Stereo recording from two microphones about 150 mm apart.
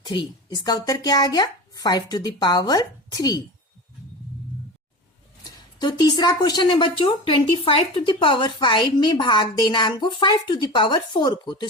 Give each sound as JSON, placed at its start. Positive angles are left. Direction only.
{"t": 0.0, "sound": "speech", "side_deg": 30}
{"t": 5.8, "sound": "a woman's voice", "side_deg": 25}